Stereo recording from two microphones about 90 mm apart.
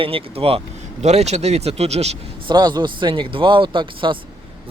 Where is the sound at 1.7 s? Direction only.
90° right.